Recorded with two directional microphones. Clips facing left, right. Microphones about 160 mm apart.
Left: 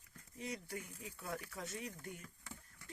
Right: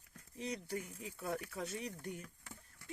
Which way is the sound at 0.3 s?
20° right (ahead or behind).